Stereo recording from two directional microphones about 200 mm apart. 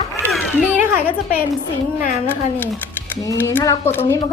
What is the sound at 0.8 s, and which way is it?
Speech, 10° right (ahead or behind).